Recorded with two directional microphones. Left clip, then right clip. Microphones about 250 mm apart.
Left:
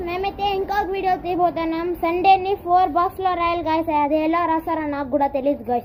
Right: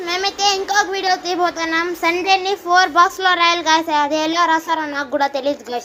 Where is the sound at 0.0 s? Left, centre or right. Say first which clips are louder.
Right 5 dB; centre.